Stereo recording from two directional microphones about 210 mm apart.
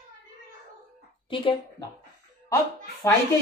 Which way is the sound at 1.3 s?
25° left (ahead or behind).